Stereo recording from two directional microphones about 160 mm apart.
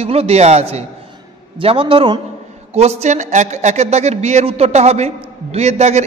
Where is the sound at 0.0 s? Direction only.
40° right (ahead or behind).